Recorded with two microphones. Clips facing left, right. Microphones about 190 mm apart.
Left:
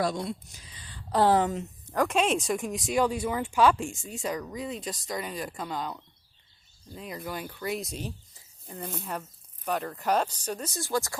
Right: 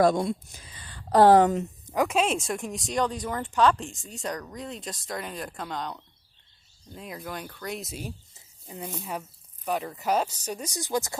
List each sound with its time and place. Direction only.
0.0 s speech: 50° right (ahead or behind)
1.9 s speech: 5° right (ahead or behind)
8.3 s a sound: 15° right (ahead or behind)
9.6 s speech: 5° right (ahead or behind)